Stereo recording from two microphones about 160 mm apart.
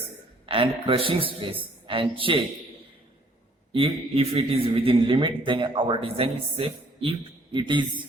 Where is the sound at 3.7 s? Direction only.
35° right (ahead or behind).